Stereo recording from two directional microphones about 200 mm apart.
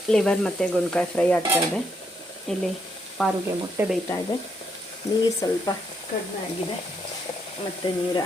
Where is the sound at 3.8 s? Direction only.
10° right (ahead or behind).